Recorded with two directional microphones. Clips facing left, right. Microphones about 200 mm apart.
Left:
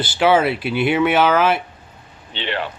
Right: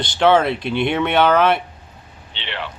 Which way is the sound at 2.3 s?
45° left (ahead or behind).